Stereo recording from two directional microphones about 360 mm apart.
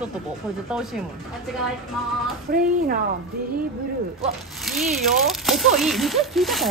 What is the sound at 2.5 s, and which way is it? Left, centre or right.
Speech, right.